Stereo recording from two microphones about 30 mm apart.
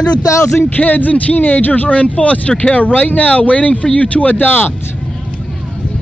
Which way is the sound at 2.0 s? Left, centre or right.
Left.